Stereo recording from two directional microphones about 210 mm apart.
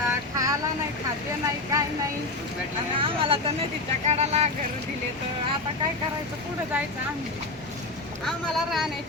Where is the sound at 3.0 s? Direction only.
25° right (ahead or behind).